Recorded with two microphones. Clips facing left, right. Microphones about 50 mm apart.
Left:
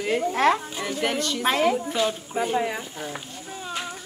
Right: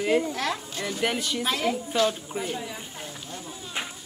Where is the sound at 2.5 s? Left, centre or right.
Left.